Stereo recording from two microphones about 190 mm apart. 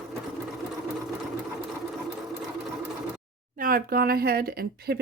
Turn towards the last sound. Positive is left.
turn(degrees=-55)  # may be behind; listen again after turning